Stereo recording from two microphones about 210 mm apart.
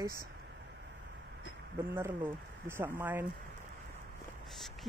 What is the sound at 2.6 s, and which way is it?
Speech, 10° right (ahead or behind).